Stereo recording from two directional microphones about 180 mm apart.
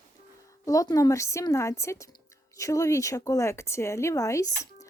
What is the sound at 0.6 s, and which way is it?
Speech, 20° left (ahead or behind).